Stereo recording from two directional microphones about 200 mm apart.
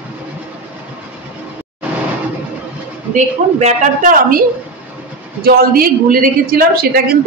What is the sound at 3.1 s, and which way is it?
A woman's voice, 35° right (ahead or behind).